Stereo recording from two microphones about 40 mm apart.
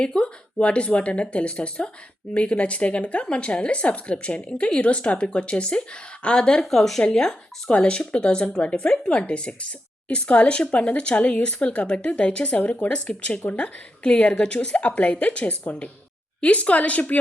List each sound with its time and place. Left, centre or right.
0.0 s speech: left
6.7 s speech: centre
7.7 s speech: left